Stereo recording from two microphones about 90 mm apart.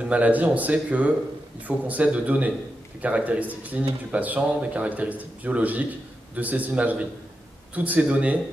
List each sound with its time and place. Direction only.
0.0 s a man's voice: 15° right (ahead or behind)